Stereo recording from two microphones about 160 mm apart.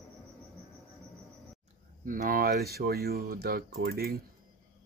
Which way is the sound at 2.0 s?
60° right (ahead or behind).